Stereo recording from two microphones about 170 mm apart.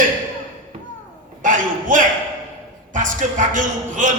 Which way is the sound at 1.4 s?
50° right (ahead or behind).